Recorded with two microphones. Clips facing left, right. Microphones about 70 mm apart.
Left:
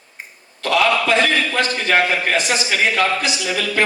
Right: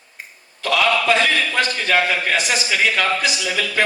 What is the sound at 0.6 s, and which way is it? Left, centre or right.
A man's voice, left.